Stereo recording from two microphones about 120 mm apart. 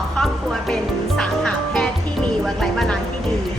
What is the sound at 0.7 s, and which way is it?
Music, 5° left (ahead or behind).